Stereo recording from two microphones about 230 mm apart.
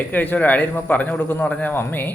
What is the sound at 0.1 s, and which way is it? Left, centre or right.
A man's voice, centre.